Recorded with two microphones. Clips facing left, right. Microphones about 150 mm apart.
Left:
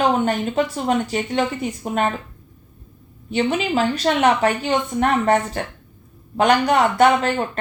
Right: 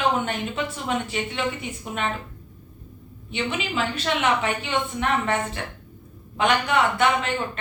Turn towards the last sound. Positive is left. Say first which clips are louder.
# left 6 dB
turn(degrees=40)  # may be behind; listen again after turning